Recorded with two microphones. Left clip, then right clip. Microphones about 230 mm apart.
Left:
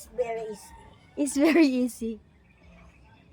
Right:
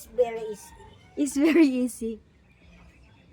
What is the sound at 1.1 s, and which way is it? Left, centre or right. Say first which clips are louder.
A woman's voice: even; centre.